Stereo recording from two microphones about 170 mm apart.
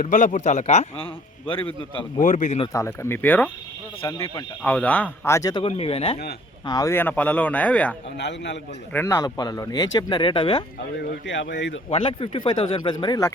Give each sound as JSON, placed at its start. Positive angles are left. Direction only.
{"t": 0.0, "sound": "a man's voice", "side_deg": 50}
{"t": 2.2, "sound": "speech", "side_deg": 50}
{"t": 2.7, "sound": "speech", "side_deg": 15}
{"t": 6.7, "sound": "speech", "side_deg": 20}
{"t": 8.2, "sound": "speech", "side_deg": 90}
{"t": 8.9, "sound": "speech", "side_deg": 15}
{"t": 11.3, "sound": "speech", "side_deg": 90}
{"t": 11.9, "sound": "speech", "side_deg": 30}